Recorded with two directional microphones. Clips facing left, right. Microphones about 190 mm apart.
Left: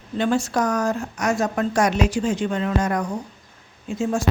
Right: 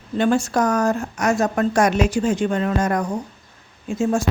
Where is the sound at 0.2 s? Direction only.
50° right (ahead or behind).